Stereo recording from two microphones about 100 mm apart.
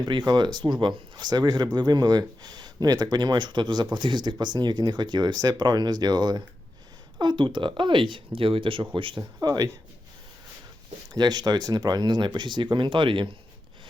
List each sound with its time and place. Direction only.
0.0 s speech: 45° right (ahead or behind)
9.4 s speech: 40° right (ahead or behind)
11.1 s speech: 40° right (ahead or behind)